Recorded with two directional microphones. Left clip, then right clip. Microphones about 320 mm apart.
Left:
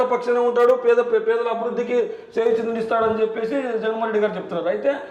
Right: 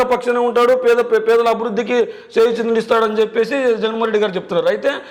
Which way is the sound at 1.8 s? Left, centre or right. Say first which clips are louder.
Right 4 dB; right.